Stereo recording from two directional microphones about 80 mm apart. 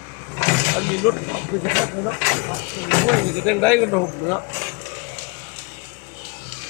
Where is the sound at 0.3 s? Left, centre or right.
Centre.